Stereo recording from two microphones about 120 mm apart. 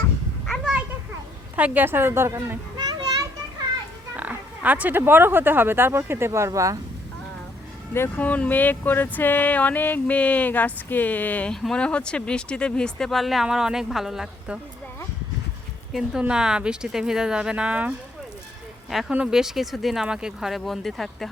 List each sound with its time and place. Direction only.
0.4 s a sound: centre (ahead or behind)
1.5 s speech: 15° right (ahead or behind)
2.7 s children playing: 35° right (ahead or behind)
4.2 s speech: 15° right (ahead or behind)
7.9 s speech: 20° left (ahead or behind); by 14.6 s 5° right (ahead or behind)
15.9 s speech: 5° right (ahead or behind)